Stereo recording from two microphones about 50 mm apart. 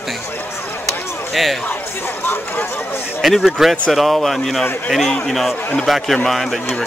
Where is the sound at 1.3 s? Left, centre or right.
Centre.